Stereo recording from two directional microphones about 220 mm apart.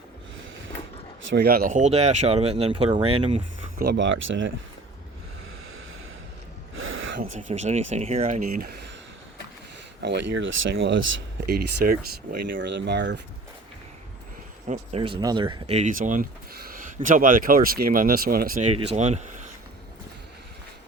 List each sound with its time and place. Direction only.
1.3 s speech: 45° right (ahead or behind); by 3.4 s 25° right (ahead or behind)
3.8 s speech: 50° right (ahead or behind)
6.7 s gasp: 65° right (ahead or behind)
7.2 s speech: 35° right (ahead or behind)
10.0 s speech: 50° right (ahead or behind)
12.5 s speech: 50° right (ahead or behind)
14.7 s speech: 25° right (ahead or behind); by 18.7 s 40° right (ahead or behind)
18.7 s speech: 25° right (ahead or behind)